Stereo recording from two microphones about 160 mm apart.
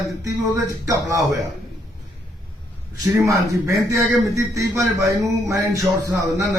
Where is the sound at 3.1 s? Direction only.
20° right (ahead or behind).